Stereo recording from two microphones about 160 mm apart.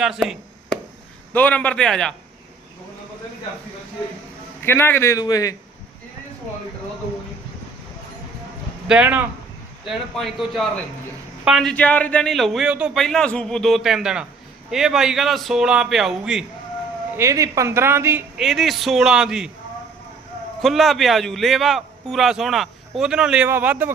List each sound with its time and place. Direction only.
0.0 s chop: 5° right (ahead or behind)
1.3 s a man's voice: 10° left (ahead or behind)
4.6 s a man's voice: 15° left (ahead or behind)
8.9 s a woman's voice: 10° right (ahead or behind)
17.2 s a woman's voice: 20° right (ahead or behind)
18.3 s speech: centre (ahead or behind)
20.6 s a woman's voice: centre (ahead or behind)